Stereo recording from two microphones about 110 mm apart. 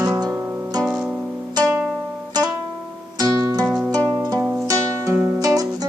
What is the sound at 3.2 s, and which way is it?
Music, 30° right (ahead or behind).